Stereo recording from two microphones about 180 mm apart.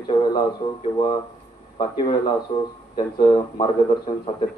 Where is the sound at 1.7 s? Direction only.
25° left (ahead or behind).